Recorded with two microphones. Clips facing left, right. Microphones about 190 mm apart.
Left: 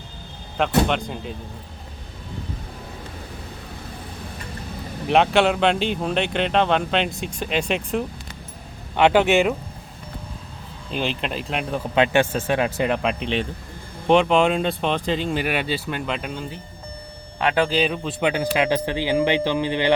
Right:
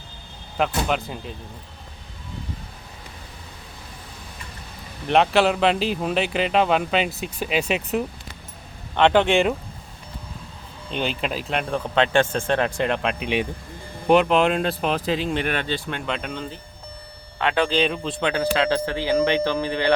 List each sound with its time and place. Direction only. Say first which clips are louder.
0.9 s speech: left 1 dB; 5° right (ahead or behind)
5.0 s speech: left 1 dB; centre (ahead or behind)
9.0 s speech: left 1 dB; 10° left (ahead or behind)
10.9 s speech: even; centre (ahead or behind)
13.2 s speech: right 1 dB; 10° right (ahead or behind); by 19.9 s 20° left (ahead or behind)